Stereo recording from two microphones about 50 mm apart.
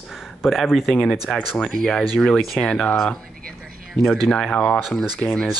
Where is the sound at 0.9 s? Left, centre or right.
Centre.